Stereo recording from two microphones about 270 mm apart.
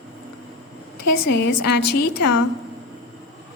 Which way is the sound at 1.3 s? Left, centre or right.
Left.